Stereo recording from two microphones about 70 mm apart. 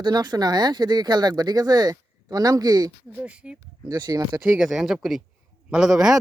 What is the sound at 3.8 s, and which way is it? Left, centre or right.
Speech, right.